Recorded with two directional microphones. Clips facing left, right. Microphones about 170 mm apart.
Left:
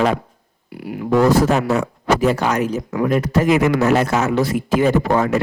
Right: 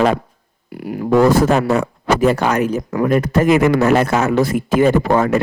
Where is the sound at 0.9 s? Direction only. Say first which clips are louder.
Right 2 dB; 45° right (ahead or behind).